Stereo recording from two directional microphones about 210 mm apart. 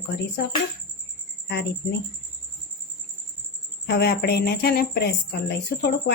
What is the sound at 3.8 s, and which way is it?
Speech, 50° left (ahead or behind).